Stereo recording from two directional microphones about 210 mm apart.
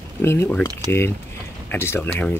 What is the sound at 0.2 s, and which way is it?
Speech, 10° left (ahead or behind).